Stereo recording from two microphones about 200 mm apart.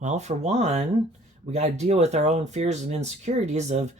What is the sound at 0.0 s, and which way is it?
Speech, 35° right (ahead or behind).